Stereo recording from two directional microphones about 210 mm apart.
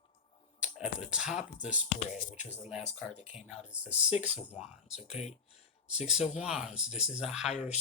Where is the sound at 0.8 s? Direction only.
5° right (ahead or behind).